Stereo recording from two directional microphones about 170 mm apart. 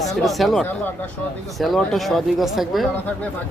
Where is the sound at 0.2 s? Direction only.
Centre (ahead or behind).